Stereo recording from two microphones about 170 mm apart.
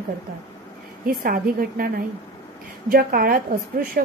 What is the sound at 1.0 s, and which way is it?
A woman's voice, 60° right (ahead or behind).